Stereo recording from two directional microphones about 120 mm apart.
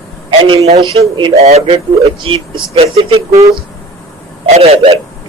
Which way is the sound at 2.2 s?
50° right (ahead or behind).